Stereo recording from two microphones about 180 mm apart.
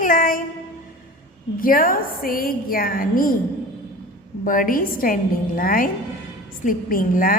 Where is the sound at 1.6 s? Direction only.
50° left (ahead or behind).